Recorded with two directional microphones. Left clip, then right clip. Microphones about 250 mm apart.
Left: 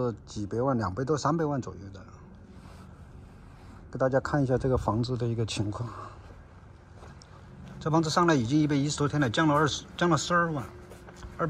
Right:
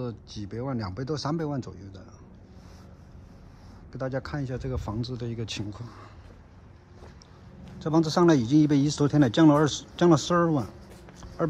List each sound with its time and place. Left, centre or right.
0.0 s speech: centre
0.9 s speech: centre
3.9 s speech: centre
7.8 s speech: centre